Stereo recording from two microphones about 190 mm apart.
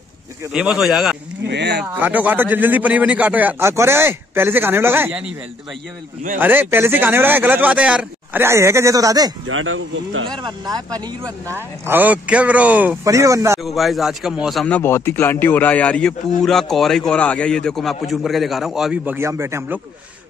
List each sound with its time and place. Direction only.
0.5 s a man's voice: 5° right (ahead or behind)
1.5 s speech: 60° right (ahead or behind)
1.9 s speech: 10° right (ahead or behind)
6.3 s speech: 10° right (ahead or behind)
9.5 s speech: 90° right
10.3 s speech: 20° right (ahead or behind)
13.6 s a man's voice: centre (ahead or behind)
19.1 s speech: 15° right (ahead or behind)